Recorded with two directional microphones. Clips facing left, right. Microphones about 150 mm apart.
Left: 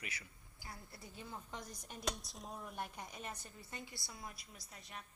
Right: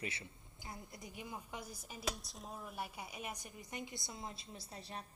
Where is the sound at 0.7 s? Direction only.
15° right (ahead or behind).